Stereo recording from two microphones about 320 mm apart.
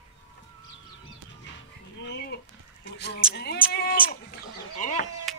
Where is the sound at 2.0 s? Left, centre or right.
Left.